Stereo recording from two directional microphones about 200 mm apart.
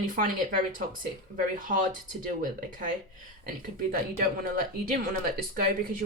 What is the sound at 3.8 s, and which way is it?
Speech, 45° right (ahead or behind).